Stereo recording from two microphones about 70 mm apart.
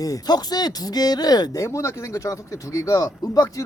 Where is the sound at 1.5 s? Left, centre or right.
Left.